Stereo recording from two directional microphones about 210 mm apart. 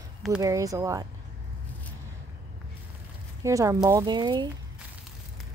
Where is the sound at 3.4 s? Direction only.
15° right (ahead or behind).